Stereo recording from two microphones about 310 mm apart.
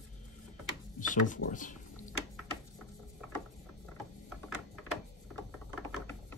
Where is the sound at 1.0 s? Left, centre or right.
Left.